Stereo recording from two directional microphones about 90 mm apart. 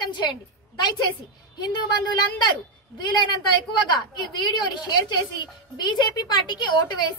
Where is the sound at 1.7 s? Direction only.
55° left (ahead or behind).